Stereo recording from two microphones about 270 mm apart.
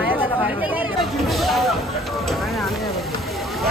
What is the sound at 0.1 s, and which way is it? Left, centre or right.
Hubbub, centre.